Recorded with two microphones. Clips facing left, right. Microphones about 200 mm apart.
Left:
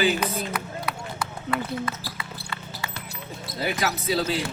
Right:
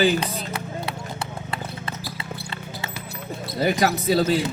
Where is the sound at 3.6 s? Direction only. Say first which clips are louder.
Right 6 dB; 50° right (ahead or behind).